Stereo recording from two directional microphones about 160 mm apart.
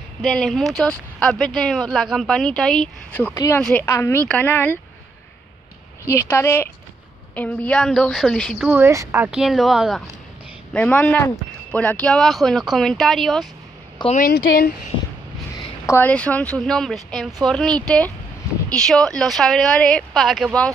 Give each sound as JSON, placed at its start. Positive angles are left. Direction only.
{"t": 0.2, "sound": "speech", "side_deg": 0}
{"t": 6.0, "sound": "speech", "side_deg": 15}
{"t": 8.6, "sound": "speech", "side_deg": -15}
{"t": 14.1, "sound": "speech", "side_deg": 65}
{"t": 15.9, "sound": "speech", "side_deg": 10}